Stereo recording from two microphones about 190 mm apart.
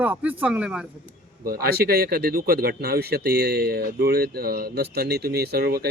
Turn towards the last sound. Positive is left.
turn(degrees=-55)  # may be behind; listen again after turning